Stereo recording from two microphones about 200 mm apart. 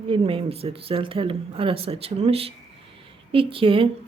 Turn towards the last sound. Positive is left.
turn(degrees=-25)  # may be behind; listen again after turning